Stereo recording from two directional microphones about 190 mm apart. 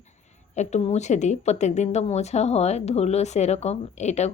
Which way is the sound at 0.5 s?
35° left (ahead or behind).